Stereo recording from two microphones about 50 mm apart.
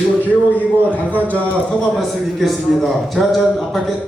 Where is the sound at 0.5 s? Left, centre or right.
Left.